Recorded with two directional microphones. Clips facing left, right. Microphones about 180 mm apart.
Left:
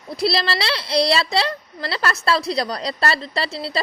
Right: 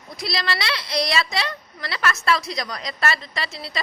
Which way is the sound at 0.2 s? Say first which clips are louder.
Left 6 dB; 30° left (ahead or behind).